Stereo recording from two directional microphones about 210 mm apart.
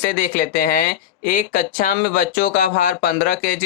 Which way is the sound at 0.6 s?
40° left (ahead or behind).